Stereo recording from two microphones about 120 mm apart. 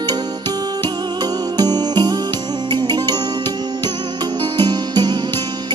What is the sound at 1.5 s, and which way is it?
Music, 35° right (ahead or behind).